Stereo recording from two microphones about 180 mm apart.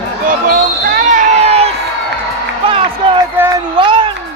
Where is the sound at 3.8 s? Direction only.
25° right (ahead or behind).